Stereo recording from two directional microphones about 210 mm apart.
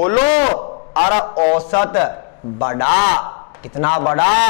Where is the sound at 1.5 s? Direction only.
10° left (ahead or behind).